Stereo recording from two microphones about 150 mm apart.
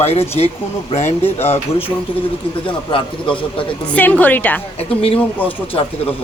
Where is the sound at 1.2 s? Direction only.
15° left (ahead or behind).